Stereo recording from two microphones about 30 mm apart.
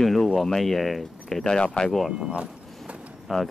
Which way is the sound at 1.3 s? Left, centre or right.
Left.